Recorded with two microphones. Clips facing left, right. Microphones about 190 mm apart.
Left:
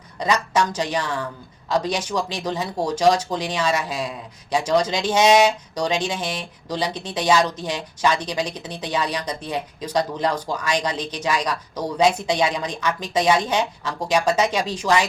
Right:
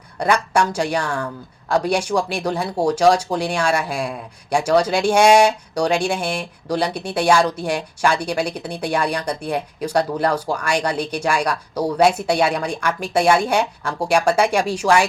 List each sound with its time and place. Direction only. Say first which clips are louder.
0.2 s speech: right 3 dB; 10° right (ahead or behind)